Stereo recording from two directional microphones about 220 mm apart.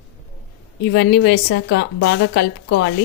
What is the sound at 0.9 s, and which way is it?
A woman's voice, 50° left (ahead or behind).